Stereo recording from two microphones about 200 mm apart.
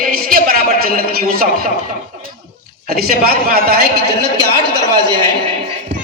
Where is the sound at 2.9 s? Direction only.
50° right (ahead or behind).